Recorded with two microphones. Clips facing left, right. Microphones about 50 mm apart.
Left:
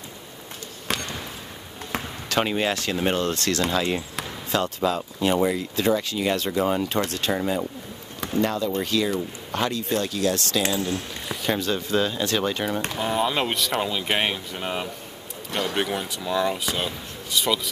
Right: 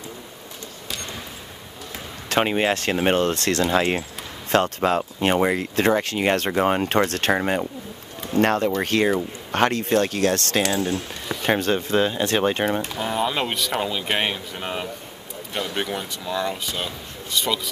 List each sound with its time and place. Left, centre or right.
2.4 s speech: right
2.7 s speech: right
4.5 s speech: right
12.9 s speech: centre